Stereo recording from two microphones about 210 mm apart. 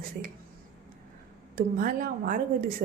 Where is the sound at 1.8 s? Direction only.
40° right (ahead or behind).